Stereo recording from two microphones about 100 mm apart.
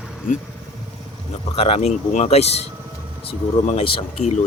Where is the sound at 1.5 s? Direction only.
85° left.